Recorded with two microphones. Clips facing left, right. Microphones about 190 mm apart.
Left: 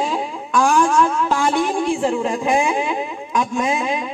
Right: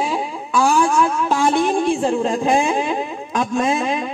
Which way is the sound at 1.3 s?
20° right (ahead or behind).